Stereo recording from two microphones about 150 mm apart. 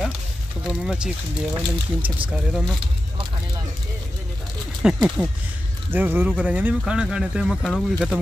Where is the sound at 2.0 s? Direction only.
35° right (ahead or behind).